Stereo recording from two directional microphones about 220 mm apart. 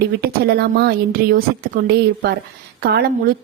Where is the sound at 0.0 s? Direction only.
45° right (ahead or behind).